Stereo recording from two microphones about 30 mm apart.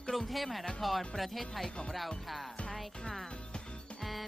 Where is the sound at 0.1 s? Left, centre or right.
Centre.